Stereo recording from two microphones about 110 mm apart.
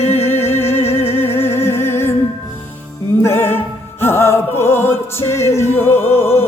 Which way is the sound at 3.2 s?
20° left (ahead or behind).